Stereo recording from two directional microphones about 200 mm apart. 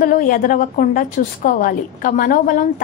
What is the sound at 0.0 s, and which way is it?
A woman's voice, 45° left (ahead or behind).